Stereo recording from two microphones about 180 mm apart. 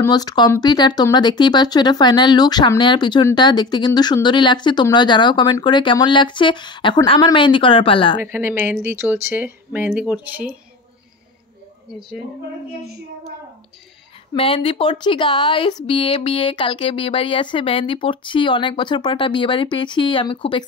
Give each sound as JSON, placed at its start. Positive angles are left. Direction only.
{"t": 0.0, "sound": "speech", "side_deg": 20}
{"t": 8.2, "sound": "speech", "side_deg": -15}
{"t": 14.3, "sound": "speech", "side_deg": 30}